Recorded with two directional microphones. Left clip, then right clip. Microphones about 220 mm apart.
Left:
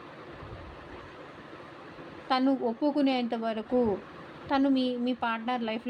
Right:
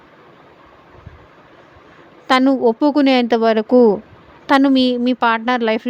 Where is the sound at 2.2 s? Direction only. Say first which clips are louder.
Right 14 dB; 60° right (ahead or behind).